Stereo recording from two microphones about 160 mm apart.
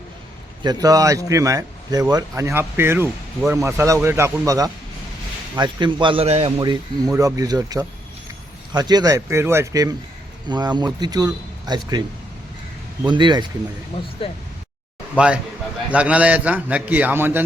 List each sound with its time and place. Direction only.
0.6 s a man's voice: 25° right (ahead or behind)
6.6 s speech: 25° right (ahead or behind)
13.1 s speech: 30° right (ahead or behind)
13.9 s speech: 35° left (ahead or behind)
15.2 s a man's voice: 10° right (ahead or behind)